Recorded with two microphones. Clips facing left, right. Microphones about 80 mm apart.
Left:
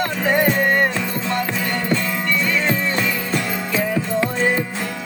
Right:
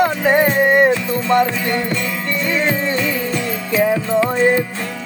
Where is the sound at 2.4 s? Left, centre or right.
Right.